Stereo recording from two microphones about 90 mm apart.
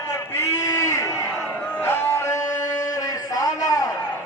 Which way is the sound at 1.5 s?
20° left (ahead or behind).